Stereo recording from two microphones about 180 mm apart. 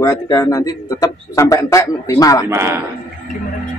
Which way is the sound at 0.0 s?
20° left (ahead or behind).